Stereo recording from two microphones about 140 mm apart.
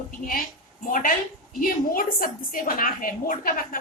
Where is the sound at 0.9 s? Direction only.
75° left (ahead or behind).